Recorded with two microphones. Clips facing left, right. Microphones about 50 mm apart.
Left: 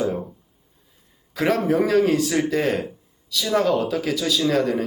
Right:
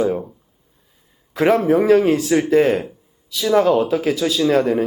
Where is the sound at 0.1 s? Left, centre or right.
Centre.